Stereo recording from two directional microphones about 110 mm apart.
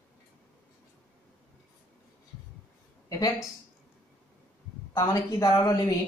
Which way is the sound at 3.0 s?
35° left (ahead or behind).